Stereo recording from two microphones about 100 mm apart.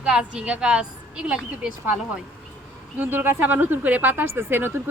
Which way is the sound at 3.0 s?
20° right (ahead or behind).